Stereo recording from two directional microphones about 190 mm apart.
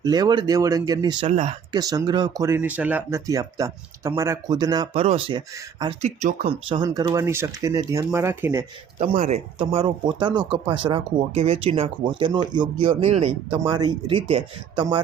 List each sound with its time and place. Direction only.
0.0 s speech: 20° right (ahead or behind)
1.3 s speech: 35° right (ahead or behind)
1.7 s speech: 20° right (ahead or behind)
9.0 s speech: 40° right (ahead or behind)
13.6 s speech: 20° right (ahead or behind)